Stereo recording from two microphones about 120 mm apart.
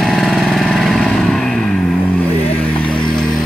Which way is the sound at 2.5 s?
10° left (ahead or behind).